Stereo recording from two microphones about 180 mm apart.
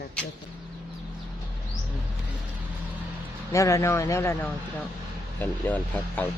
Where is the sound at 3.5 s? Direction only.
15° left (ahead or behind).